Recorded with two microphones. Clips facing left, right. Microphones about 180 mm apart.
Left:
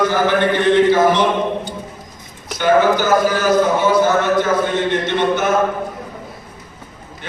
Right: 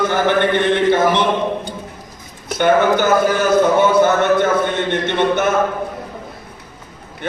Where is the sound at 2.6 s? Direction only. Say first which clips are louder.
Even; 55° right (ahead or behind).